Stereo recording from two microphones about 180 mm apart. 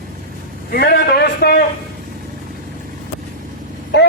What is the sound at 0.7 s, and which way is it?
Speech, 65° left (ahead or behind).